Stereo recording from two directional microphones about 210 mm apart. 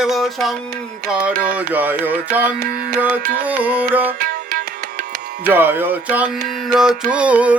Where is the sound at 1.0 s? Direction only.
5° right (ahead or behind).